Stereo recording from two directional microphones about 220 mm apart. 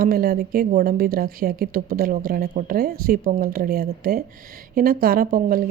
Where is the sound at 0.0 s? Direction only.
40° right (ahead or behind).